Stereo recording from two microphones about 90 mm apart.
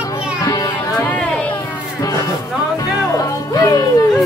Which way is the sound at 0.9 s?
15° left (ahead or behind).